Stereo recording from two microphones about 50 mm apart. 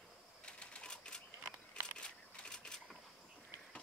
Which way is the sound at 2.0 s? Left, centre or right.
Centre.